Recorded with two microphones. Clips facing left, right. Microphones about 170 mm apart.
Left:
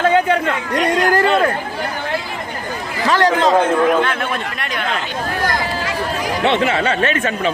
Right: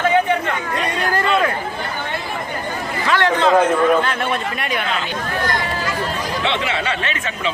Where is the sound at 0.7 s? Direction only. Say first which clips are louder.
Left 7 dB; 80° left.